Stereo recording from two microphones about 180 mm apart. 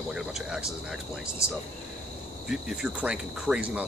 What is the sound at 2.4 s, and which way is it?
Speech, 5° right (ahead or behind).